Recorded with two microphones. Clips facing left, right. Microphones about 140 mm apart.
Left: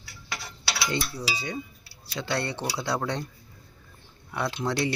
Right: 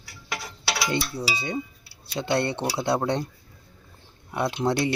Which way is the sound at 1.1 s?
25° right (ahead or behind).